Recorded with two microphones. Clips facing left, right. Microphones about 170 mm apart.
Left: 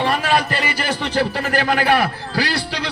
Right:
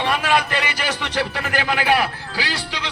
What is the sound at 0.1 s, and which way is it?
A man's voice, 40° left (ahead or behind).